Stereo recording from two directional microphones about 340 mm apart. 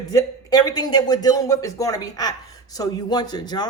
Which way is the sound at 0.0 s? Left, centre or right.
Centre.